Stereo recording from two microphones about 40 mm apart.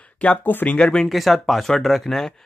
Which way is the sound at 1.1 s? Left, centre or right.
Centre.